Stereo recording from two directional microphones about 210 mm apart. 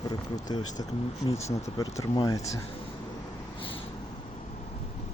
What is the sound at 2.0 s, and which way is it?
Speech, 20° left (ahead or behind).